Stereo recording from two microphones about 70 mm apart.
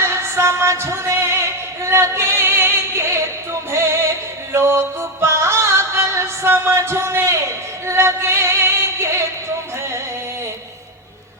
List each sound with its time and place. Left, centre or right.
0.0 s music: right